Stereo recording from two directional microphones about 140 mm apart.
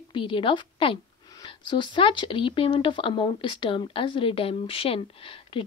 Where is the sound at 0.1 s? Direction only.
40° left (ahead or behind).